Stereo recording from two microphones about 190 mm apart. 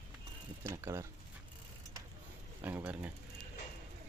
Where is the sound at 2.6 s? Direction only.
10° right (ahead or behind).